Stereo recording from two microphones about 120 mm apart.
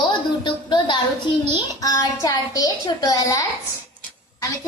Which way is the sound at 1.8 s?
30° left (ahead or behind).